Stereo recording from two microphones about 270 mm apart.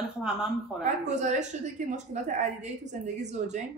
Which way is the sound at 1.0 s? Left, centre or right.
Right.